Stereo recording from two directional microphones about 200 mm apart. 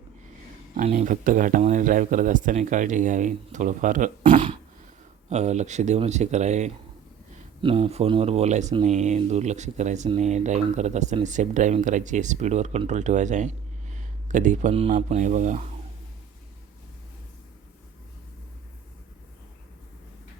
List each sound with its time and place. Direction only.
0.8 s speech: 35° right (ahead or behind)
4.3 s a sound: 25° right (ahead or behind)
5.3 s speech: 35° right (ahead or behind)